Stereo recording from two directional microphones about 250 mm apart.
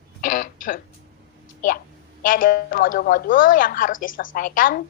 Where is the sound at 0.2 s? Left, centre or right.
Left.